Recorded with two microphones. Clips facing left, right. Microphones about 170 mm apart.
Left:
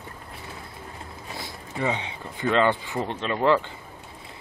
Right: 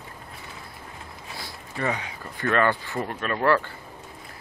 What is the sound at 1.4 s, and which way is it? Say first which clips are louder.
Speech: left 2 dB; 20° left (ahead or behind).